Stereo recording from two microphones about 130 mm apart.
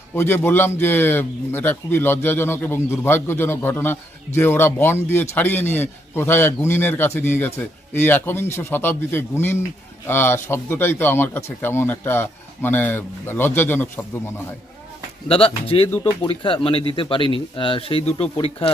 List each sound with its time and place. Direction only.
0.1 s a man's voice: 15° left (ahead or behind)
15.2 s speech: 45° left (ahead or behind)